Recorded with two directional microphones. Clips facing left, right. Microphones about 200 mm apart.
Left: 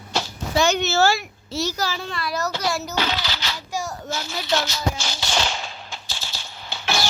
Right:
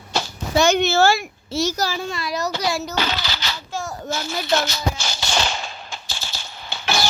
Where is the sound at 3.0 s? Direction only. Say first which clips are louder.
Even; 45° right (ahead or behind).